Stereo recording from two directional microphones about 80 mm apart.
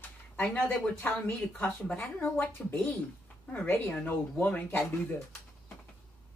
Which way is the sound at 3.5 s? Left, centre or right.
Left.